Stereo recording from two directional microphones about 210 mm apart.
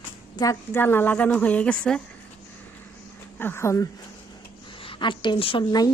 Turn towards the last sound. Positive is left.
turn(degrees=20)  # may be behind; listen again after turning